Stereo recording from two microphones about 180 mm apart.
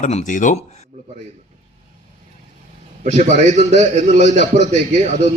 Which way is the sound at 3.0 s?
40° right (ahead or behind).